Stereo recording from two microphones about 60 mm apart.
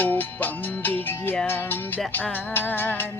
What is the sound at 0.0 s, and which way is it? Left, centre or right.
Music, left.